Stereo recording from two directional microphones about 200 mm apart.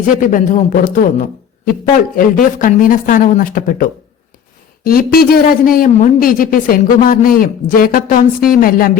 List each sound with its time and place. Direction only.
0.0 s a man's voice: 40° left (ahead or behind)